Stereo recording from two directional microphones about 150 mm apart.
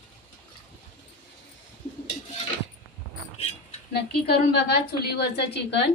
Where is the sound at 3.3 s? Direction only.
45° left (ahead or behind).